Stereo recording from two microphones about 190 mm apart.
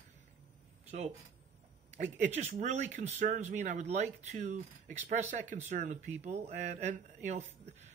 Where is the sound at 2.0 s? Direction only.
35° right (ahead or behind).